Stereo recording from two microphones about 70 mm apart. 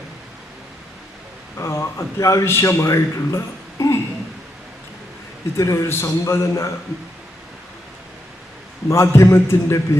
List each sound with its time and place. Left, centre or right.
1.5 s a man's voice: left
2.4 s a man's voice: left
2.8 s speech: left
5.5 s a man's voice: left
8.9 s a man's voice: left